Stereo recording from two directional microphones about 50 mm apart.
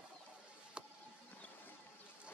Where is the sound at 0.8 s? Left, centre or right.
Centre.